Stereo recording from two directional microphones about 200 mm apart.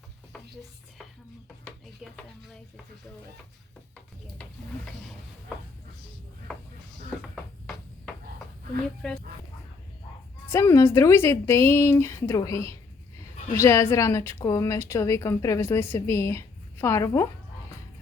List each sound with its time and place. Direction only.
8.7 s speech: 5° left (ahead or behind)
10.5 s a woman's voice: 15° left (ahead or behind)